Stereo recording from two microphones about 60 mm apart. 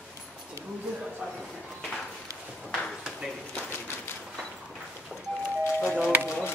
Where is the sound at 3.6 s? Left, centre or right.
Left.